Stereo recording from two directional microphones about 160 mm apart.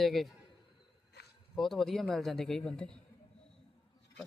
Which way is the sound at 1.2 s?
90° left.